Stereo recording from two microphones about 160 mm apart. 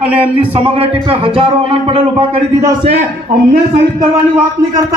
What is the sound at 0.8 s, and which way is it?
A man's voice, 35° right (ahead or behind).